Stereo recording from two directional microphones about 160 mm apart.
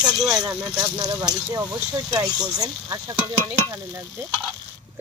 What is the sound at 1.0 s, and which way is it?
Frying, 25° right (ahead or behind).